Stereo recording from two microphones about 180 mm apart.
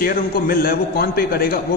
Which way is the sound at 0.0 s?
55° left (ahead or behind).